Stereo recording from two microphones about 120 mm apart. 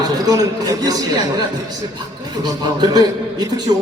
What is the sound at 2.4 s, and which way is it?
A man's voice, 35° right (ahead or behind).